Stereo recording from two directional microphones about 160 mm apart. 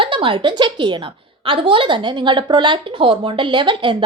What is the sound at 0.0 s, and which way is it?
Speech, 30° right (ahead or behind).